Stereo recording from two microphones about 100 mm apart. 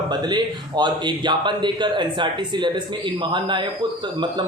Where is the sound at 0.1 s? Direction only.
50° right (ahead or behind).